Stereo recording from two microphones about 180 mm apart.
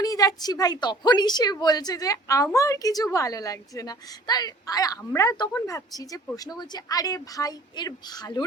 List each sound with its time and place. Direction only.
0.0 s a woman's voice: 20° left (ahead or behind)